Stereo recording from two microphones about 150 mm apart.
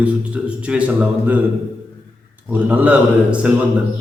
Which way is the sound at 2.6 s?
10° right (ahead or behind).